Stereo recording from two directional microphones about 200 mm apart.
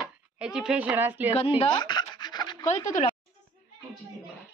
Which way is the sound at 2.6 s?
35° left (ahead or behind).